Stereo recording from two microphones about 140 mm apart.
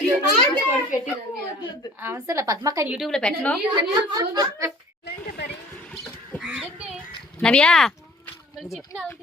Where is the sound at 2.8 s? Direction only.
5° right (ahead or behind).